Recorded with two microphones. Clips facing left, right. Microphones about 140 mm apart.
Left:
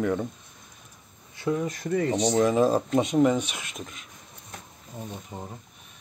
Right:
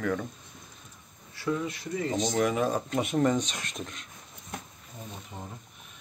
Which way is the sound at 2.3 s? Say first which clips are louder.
Left 6 dB; 30° left (ahead or behind).